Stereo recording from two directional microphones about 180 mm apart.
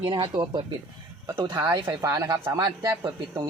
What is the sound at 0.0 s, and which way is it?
Speech, 25° right (ahead or behind).